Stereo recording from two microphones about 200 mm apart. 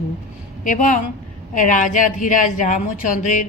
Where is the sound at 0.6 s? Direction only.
40° left (ahead or behind).